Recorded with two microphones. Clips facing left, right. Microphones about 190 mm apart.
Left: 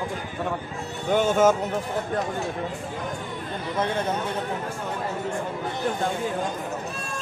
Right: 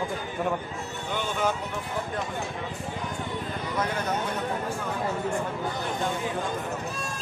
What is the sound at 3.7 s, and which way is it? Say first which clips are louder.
Speech: left 4 dB; 30° left (ahead or behind).